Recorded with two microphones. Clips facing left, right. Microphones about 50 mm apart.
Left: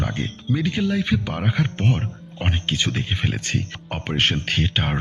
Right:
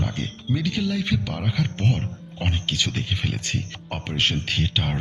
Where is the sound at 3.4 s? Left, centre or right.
Left.